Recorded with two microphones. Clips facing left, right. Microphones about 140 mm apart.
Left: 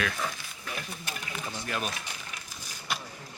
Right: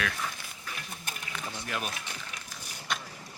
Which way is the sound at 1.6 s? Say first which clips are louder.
Left 2 dB; 5° right (ahead or behind).